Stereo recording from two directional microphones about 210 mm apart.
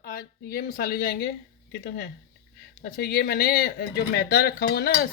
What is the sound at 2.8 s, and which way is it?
Speech, 50° left (ahead or behind).